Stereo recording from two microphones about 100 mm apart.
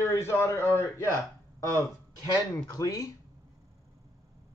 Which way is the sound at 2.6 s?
35° left (ahead or behind).